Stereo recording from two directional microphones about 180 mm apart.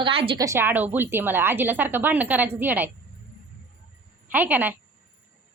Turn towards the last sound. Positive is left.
turn(degrees=-10)  # may be behind; listen again after turning